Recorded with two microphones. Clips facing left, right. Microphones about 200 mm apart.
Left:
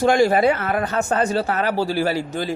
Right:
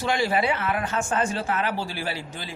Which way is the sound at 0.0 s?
45° left (ahead or behind).